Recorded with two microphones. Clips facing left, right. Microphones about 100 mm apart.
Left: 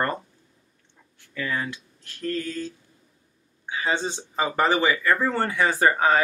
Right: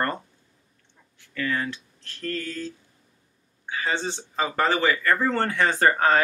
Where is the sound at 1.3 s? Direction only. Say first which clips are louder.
Right 1 dB; 15° left (ahead or behind).